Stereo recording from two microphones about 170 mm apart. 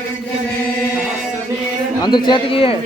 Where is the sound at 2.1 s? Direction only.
25° left (ahead or behind).